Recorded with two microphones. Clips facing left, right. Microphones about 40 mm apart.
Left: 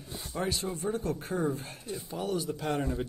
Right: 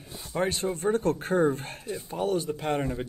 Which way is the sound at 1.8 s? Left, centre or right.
Right.